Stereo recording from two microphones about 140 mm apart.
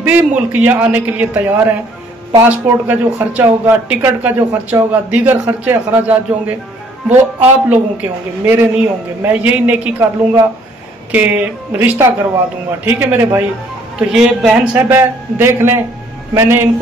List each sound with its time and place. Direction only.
0.0 s speech: 10° right (ahead or behind)
15.0 s a man's voice: 20° right (ahead or behind)